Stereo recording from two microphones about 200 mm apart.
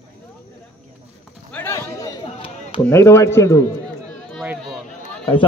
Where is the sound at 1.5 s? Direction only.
10° left (ahead or behind).